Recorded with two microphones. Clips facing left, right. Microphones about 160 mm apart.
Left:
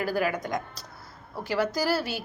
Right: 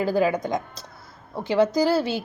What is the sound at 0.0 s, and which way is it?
A woman's voice, 20° right (ahead or behind).